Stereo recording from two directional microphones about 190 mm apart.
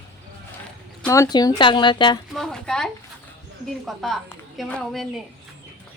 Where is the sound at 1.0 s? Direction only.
15° left (ahead or behind).